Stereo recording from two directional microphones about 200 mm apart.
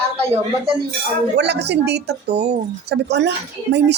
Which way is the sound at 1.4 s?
55° right (ahead or behind).